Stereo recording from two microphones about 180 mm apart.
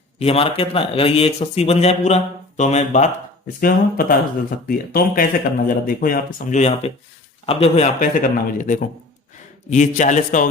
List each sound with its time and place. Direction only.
0.2 s a man's voice: 30° left (ahead or behind)
3.6 s speech: 55° left (ahead or behind)